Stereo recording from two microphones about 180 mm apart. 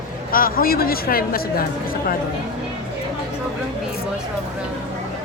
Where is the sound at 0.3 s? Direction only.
55° left (ahead or behind).